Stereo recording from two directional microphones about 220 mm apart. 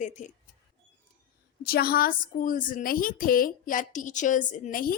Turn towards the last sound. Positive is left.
turn(degrees=40)  # may be behind; listen again after turning